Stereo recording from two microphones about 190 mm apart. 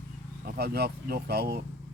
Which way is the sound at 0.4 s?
55° right (ahead or behind).